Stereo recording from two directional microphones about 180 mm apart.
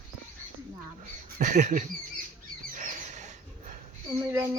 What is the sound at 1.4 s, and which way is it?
Speech, 40° right (ahead or behind).